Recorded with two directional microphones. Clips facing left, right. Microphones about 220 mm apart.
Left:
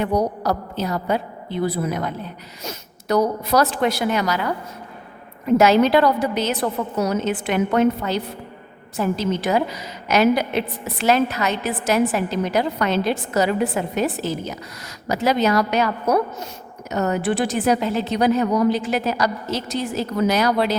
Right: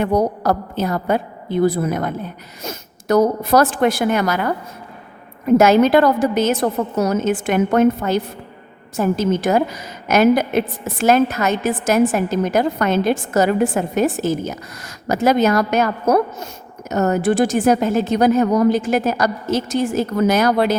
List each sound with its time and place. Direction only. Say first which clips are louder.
0.0 s a woman's voice: right 3 dB; 50° right (ahead or behind)